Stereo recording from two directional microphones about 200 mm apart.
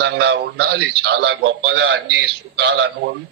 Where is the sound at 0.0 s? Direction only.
55° right (ahead or behind).